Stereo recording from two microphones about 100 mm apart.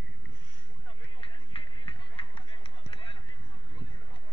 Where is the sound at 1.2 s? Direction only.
65° left (ahead or behind).